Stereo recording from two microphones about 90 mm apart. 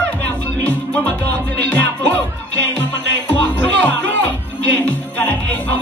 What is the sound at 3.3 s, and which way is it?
Music, 20° left (ahead or behind).